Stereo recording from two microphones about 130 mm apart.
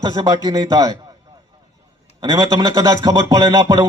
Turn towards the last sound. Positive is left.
turn(degrees=-30)  # may be behind; listen again after turning